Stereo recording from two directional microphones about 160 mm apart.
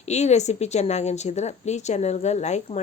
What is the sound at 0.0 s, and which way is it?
A woman's voice, 45° left (ahead or behind).